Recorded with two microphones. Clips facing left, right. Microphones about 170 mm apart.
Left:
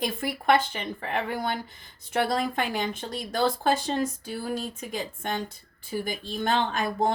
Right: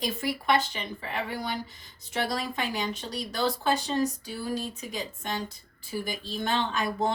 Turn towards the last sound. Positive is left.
turn(degrees=50)  # may be behind; listen again after turning